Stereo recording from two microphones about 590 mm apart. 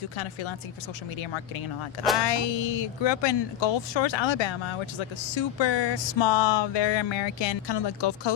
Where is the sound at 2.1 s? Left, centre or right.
Left.